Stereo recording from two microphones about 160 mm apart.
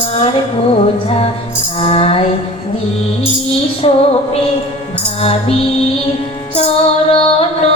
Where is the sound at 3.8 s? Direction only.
35° left (ahead or behind).